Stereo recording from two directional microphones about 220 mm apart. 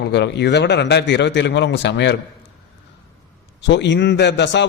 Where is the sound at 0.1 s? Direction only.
50° left (ahead or behind).